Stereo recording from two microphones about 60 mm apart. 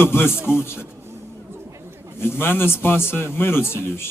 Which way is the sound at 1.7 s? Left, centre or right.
Right.